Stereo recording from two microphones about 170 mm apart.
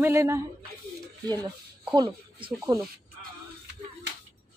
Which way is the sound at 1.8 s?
20° right (ahead or behind).